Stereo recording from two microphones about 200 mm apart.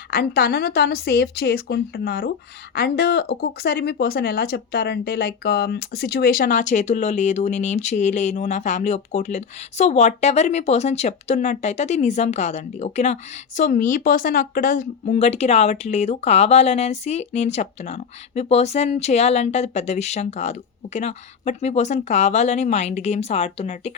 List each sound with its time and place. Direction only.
0.1 s speech: 50° left (ahead or behind); by 23.9 s 30° left (ahead or behind)